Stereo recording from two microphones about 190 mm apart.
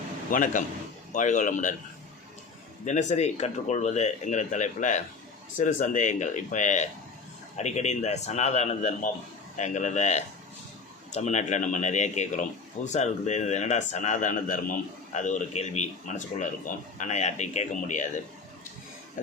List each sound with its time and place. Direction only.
0.3 s a man's voice: 45° left (ahead or behind)
2.8 s speech: 40° left (ahead or behind)